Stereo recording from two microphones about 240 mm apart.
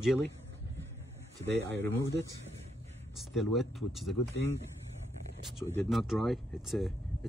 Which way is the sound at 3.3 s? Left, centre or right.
Centre.